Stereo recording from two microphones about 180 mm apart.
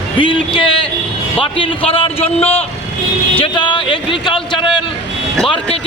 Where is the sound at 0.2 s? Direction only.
25° left (ahead or behind).